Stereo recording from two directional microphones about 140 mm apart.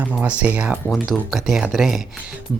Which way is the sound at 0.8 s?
5° left (ahead or behind).